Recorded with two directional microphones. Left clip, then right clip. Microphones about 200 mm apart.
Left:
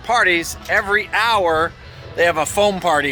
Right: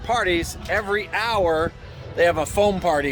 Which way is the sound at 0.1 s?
Centre (ahead or behind).